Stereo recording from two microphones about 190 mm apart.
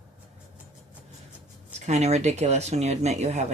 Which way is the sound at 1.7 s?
35° right (ahead or behind).